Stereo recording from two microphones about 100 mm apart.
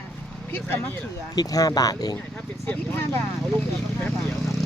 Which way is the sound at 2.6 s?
20° left (ahead or behind).